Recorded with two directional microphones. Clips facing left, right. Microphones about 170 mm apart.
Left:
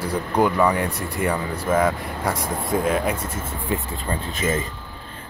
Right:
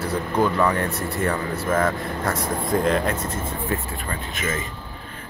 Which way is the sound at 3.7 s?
25° left (ahead or behind).